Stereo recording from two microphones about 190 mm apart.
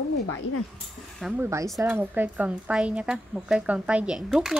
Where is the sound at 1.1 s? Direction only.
5° right (ahead or behind).